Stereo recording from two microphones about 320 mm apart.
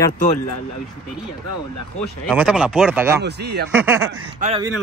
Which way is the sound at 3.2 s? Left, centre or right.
Right.